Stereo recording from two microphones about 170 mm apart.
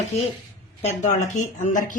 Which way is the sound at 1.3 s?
45° left (ahead or behind).